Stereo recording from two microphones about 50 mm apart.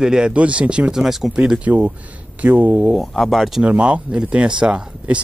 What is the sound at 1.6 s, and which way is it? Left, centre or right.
Speech, right.